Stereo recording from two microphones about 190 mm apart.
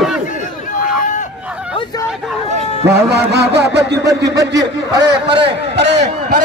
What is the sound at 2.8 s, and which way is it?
Music, 60° right (ahead or behind).